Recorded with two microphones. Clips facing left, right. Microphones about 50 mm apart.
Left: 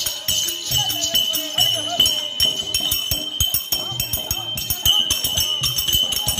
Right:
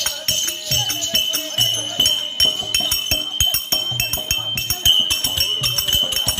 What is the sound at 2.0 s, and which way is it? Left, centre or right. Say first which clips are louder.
Music: right 3 dB; right.